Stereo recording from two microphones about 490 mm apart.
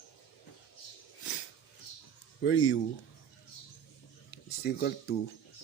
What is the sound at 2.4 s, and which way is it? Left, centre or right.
Speech, left.